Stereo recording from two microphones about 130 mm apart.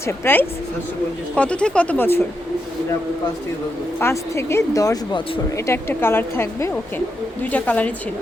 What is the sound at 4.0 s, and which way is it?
A woman's voice, 20° left (ahead or behind).